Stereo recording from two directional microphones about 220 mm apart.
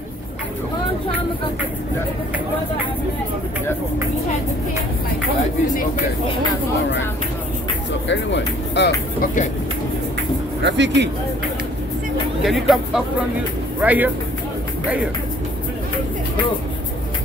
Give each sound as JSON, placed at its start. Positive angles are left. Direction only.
{"t": 8.1, "sound": "speech", "side_deg": 55}
{"t": 9.2, "sound": "speech", "side_deg": 35}
{"t": 10.6, "sound": "speech", "side_deg": -55}
{"t": 12.4, "sound": "speech", "side_deg": 0}